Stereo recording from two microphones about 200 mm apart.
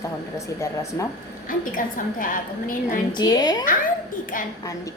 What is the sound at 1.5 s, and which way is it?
A woman's voice, 45° left (ahead or behind).